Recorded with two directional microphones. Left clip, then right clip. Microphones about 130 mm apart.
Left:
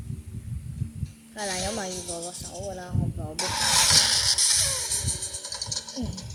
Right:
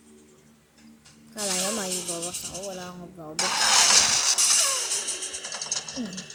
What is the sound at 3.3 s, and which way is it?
Vehicle, 30° right (ahead or behind).